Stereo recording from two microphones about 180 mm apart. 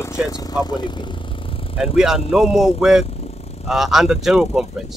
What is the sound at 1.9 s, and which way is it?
Speech, 5° right (ahead or behind).